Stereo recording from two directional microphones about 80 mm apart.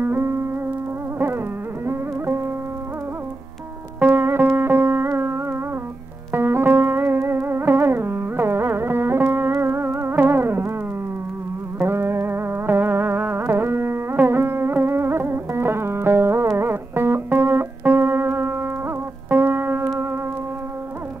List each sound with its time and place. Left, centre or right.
0.0 s music: right
1.9 s music: right
4.0 s music: right
11.8 s music: right